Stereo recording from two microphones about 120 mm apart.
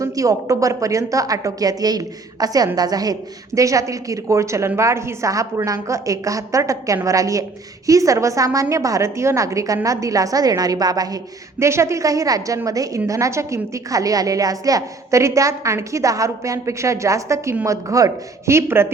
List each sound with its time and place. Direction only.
0.0 s a woman's voice: 30° right (ahead or behind)